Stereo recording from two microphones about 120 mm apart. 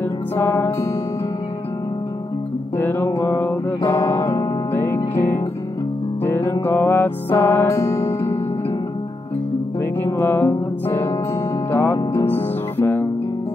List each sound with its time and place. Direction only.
0.4 s music: 25° left (ahead or behind)
2.8 s music: 20° left (ahead or behind)
9.8 s music: 20° left (ahead or behind)